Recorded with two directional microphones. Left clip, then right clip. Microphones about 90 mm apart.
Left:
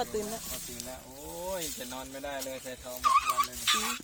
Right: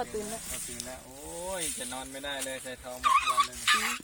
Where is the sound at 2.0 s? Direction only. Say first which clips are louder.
Even; 25° right (ahead or behind).